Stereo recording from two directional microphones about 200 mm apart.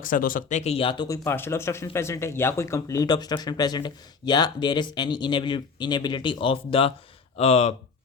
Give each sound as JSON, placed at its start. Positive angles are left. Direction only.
{"t": 0.0, "sound": "speech", "side_deg": 45}